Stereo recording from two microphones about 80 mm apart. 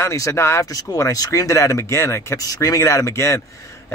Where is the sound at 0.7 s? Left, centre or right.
Left.